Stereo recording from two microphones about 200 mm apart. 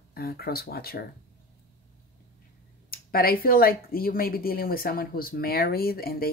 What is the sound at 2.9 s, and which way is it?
Speech, 45° left (ahead or behind).